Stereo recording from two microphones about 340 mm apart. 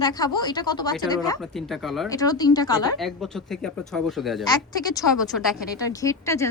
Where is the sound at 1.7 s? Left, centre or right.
Centre.